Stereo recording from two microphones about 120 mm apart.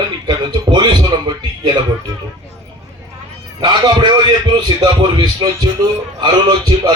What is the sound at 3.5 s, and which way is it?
Speech, 35° right (ahead or behind).